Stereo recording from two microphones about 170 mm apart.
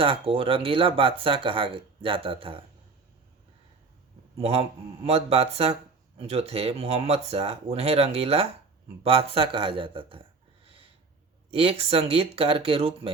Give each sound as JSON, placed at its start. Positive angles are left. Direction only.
{"t": 0.0, "sound": "speech", "side_deg": -30}
{"t": 4.4, "sound": "a man's voice", "side_deg": -35}
{"t": 11.5, "sound": "speech", "side_deg": -35}